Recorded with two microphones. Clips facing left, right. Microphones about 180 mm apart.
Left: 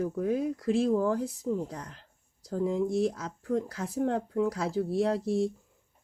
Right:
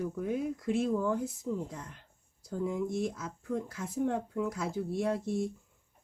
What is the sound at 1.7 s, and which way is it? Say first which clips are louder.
Speech: left 3 dB; 90° left.